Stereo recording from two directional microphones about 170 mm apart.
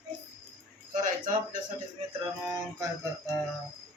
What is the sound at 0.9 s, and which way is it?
Speech, 50° right (ahead or behind).